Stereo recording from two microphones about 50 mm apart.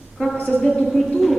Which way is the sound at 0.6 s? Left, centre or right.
Centre.